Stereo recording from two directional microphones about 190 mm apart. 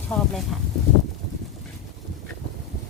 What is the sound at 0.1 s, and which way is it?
Speech, 5° left (ahead or behind).